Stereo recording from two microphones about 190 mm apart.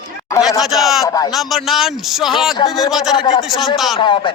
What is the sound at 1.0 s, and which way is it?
Speech, 20° left (ahead or behind).